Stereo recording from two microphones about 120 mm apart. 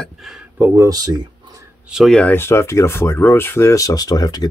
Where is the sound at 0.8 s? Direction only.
35° right (ahead or behind).